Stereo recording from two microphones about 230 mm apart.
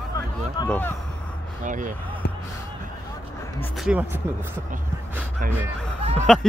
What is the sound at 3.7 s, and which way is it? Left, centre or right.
Speech, centre.